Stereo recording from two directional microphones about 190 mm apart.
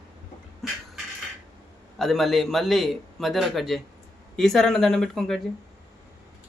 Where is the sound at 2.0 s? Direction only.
Centre (ahead or behind).